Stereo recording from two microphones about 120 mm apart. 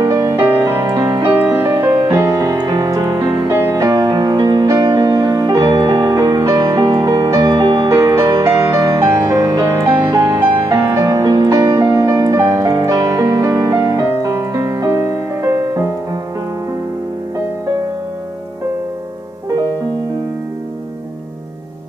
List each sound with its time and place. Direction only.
0.0 s music: 30° right (ahead or behind)
1.5 s music: 20° right (ahead or behind)
2.4 s music: 35° right (ahead or behind)
3.4 s music: 20° right (ahead or behind)
10.4 s music: 35° right (ahead or behind)
14.3 s music: 25° right (ahead or behind)